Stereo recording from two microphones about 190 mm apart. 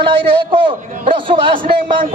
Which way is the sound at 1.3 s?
25° right (ahead or behind).